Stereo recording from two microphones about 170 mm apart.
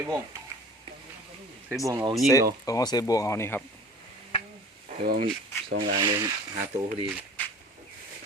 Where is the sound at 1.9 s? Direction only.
20° right (ahead or behind).